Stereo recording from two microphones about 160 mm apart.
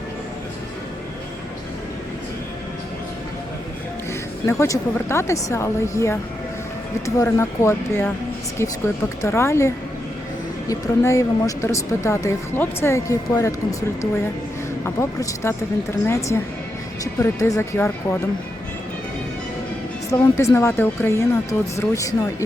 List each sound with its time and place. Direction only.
4.4 s speech: 20° left (ahead or behind)
20.1 s speech: 15° left (ahead or behind)